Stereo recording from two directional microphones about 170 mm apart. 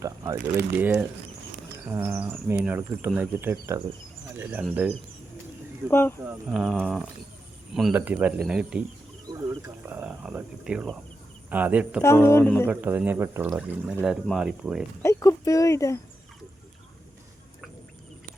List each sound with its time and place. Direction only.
0.0 s speech: 20° right (ahead or behind)
5.9 s speech: 15° left (ahead or behind)
6.5 s speech: 5° right (ahead or behind)
9.2 s a sound: 20° right (ahead or behind)
9.8 s speech: 10° right (ahead or behind)
12.0 s speech: 15° left (ahead or behind)
12.6 s speech: 10° right (ahead or behind)
15.0 s speech: 20° left (ahead or behind)